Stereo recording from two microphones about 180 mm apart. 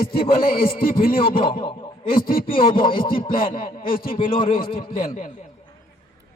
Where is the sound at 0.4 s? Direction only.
55° left (ahead or behind).